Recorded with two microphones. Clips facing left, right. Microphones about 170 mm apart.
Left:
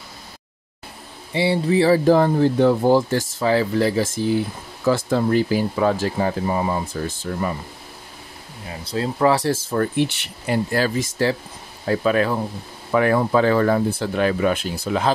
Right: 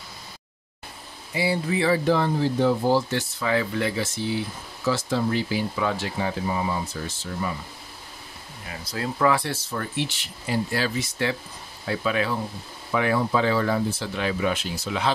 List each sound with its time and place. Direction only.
1.3 s speech: 30° left (ahead or behind); by 3.0 s 55° left (ahead or behind)
3.3 s speech: 35° left (ahead or behind)
4.8 s speech: 55° left (ahead or behind)
8.9 s speech: 30° left (ahead or behind)
9.7 s speech: 50° left (ahead or behind)